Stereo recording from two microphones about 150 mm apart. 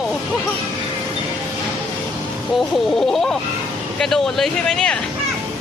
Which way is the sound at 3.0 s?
5° left (ahead or behind).